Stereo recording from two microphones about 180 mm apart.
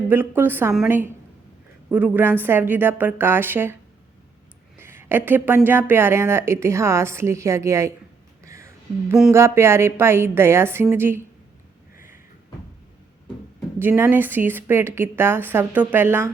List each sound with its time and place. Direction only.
0.1 s speech: 10° right (ahead or behind)
4.8 s speech: 15° right (ahead or behind)
8.4 s a sound: 15° right (ahead or behind)
9.3 s speech: 15° right (ahead or behind)
13.7 s speech: 15° right (ahead or behind)